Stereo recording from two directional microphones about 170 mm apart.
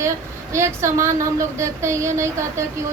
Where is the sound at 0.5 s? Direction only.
15° right (ahead or behind).